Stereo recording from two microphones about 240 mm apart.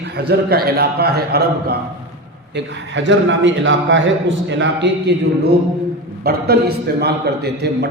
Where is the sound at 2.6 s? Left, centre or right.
Right.